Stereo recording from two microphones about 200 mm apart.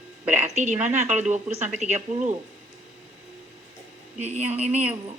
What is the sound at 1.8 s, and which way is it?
Speech, 35° right (ahead or behind).